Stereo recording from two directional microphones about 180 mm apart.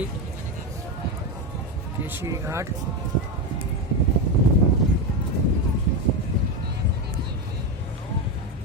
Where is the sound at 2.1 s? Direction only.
15° right (ahead or behind).